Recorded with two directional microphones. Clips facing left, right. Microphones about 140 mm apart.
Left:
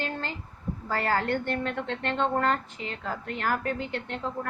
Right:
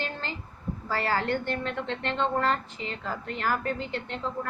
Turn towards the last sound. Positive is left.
turn(degrees=55)  # may be behind; listen again after turning